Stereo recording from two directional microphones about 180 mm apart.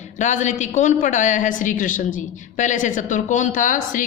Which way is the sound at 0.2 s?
40° left (ahead or behind).